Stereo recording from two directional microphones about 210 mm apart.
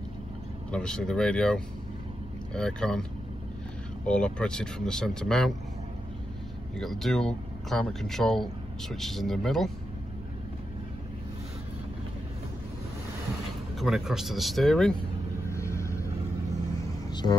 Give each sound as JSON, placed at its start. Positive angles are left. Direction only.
{"t": 0.7, "sound": "speech", "side_deg": 5}
{"t": 6.8, "sound": "speech", "side_deg": 0}
{"t": 13.7, "sound": "speech", "side_deg": 0}
{"t": 15.4, "sound": "vehicle", "side_deg": 15}
{"t": 17.1, "sound": "a sound", "side_deg": 20}